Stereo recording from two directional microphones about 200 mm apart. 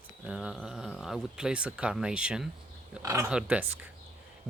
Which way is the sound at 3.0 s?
15° right (ahead or behind).